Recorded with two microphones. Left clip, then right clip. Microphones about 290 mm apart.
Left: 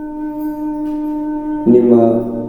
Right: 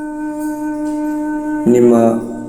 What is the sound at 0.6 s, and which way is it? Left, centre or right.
Music, right.